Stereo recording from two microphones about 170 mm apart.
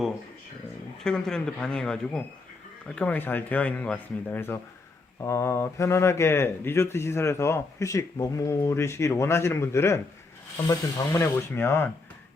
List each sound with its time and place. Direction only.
1.0 s speech: 5° left (ahead or behind)